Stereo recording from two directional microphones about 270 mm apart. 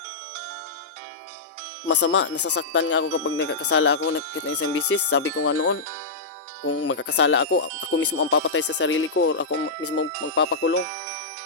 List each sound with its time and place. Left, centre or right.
1.9 s speech: left
2.3 s speech: left
2.6 s speech: left
6.7 s speech: left